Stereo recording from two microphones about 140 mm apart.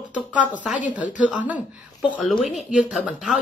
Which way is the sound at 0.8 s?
10° right (ahead or behind).